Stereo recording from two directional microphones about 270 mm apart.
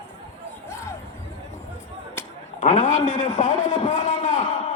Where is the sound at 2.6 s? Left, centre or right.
Left.